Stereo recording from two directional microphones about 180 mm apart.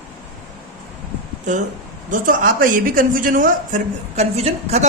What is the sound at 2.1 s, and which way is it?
Speech, 50° right (ahead or behind).